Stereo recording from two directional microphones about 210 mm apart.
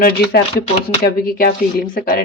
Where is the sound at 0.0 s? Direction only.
45° left (ahead or behind).